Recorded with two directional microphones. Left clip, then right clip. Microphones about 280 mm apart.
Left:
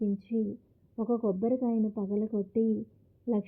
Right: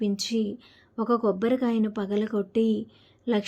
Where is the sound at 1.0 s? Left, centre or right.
Right.